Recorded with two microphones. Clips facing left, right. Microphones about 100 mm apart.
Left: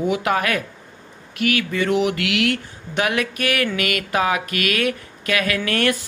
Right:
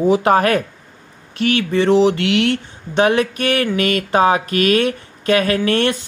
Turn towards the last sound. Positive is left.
turn(degrees=-25)  # may be behind; listen again after turning